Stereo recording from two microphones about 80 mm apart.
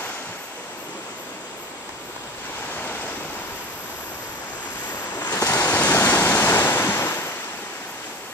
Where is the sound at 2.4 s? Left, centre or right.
Left.